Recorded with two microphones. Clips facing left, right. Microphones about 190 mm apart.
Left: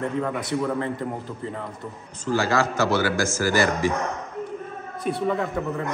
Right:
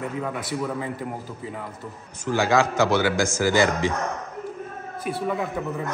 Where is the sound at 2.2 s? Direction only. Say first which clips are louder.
Right 1 dB; 15° right (ahead or behind).